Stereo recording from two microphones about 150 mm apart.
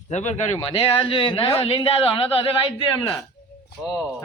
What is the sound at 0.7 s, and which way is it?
A man's voice, 40° left (ahead or behind).